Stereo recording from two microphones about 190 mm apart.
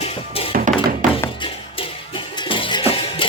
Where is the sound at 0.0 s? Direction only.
30° left (ahead or behind).